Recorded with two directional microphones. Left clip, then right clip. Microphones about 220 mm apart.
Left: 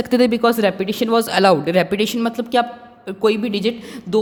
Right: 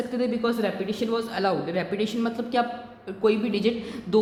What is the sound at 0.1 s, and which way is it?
A man's voice, 50° left (ahead or behind).